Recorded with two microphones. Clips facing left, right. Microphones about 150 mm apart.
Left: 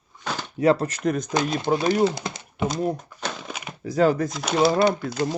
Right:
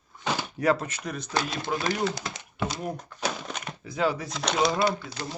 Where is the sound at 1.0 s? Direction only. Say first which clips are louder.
Left 13 dB; 45° left (ahead or behind).